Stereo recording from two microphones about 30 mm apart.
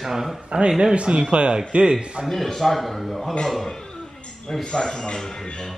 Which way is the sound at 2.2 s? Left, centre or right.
Centre.